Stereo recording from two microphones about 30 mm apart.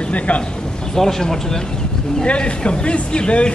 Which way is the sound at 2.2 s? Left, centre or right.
Left.